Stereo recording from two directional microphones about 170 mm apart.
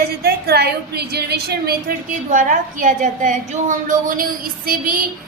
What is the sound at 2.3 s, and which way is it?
A woman's voice, 50° right (ahead or behind).